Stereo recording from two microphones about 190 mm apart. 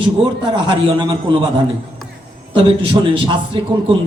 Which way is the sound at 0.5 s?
25° right (ahead or behind).